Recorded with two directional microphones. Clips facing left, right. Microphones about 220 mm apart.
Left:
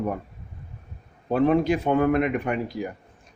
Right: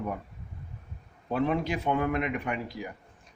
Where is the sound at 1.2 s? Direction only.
45° left (ahead or behind).